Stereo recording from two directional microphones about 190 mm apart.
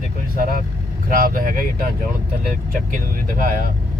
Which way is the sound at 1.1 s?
50° right (ahead or behind).